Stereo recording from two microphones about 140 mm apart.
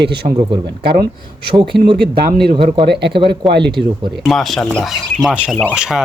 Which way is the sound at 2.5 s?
50° right (ahead or behind).